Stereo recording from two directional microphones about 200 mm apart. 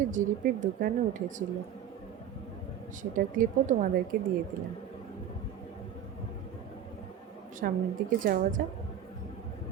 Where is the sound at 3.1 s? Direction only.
40° right (ahead or behind).